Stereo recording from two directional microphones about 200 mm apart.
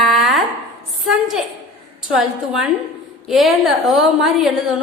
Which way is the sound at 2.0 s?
Centre (ahead or behind).